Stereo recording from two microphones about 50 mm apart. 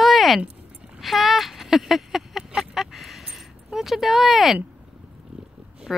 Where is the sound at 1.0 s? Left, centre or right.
Centre.